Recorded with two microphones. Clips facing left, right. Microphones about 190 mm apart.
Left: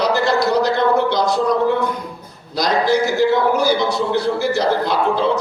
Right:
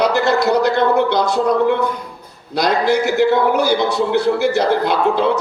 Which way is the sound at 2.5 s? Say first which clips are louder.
Right 1 dB; 60° right (ahead or behind).